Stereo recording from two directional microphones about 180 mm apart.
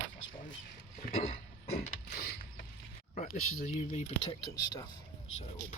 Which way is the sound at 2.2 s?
60° left (ahead or behind).